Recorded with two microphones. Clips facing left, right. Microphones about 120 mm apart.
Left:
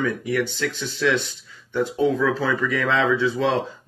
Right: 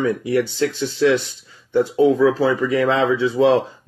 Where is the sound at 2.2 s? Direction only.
30° right (ahead or behind).